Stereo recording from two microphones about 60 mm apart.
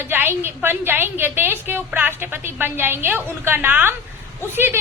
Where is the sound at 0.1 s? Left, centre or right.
Right.